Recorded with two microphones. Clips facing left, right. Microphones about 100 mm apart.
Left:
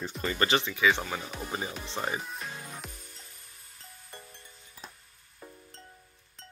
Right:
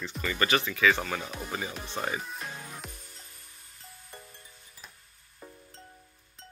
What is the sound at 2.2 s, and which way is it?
Music, centre (ahead or behind).